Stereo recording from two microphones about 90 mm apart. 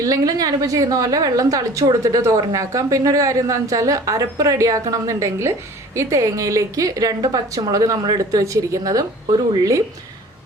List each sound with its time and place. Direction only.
0.0 s a woman's voice: 40° right (ahead or behind)